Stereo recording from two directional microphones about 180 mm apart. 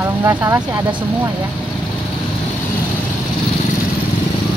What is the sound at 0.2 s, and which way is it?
Speech, 15° right (ahead or behind).